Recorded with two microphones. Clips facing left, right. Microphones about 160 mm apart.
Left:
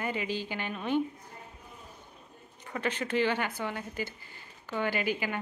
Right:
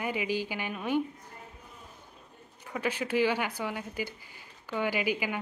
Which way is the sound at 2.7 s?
5° right (ahead or behind).